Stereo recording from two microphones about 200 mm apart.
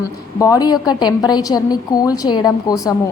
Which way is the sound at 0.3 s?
15° left (ahead or behind).